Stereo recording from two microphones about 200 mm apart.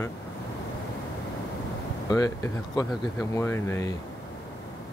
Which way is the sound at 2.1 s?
15° left (ahead or behind).